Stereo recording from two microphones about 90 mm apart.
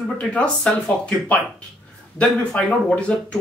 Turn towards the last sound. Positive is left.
turn(degrees=15)  # may be behind; listen again after turning